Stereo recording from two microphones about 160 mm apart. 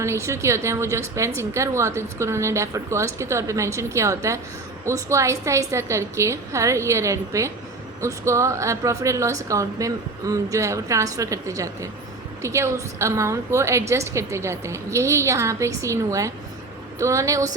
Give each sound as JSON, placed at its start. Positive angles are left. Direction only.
{"t": 0.0, "sound": "a woman's voice", "side_deg": -20}